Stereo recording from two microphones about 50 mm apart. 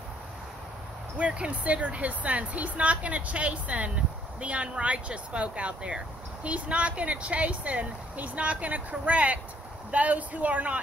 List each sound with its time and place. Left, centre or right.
1.1 s speech: right